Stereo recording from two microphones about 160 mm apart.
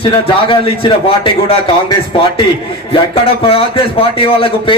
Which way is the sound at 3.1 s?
35° left (ahead or behind).